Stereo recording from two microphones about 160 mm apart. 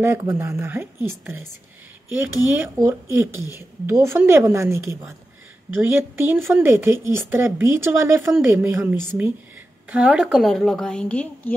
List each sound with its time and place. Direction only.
0.0 s a woman's voice: 15° right (ahead or behind); by 11.5 s 5° left (ahead or behind)